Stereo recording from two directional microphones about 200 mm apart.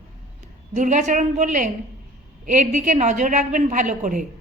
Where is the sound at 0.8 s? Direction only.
40° right (ahead or behind).